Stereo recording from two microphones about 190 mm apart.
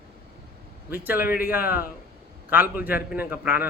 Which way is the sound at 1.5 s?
10° right (ahead or behind).